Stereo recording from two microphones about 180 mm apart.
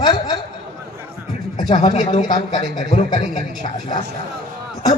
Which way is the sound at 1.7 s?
40° left (ahead or behind).